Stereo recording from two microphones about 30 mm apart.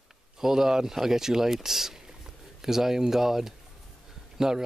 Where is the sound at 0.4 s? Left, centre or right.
Centre.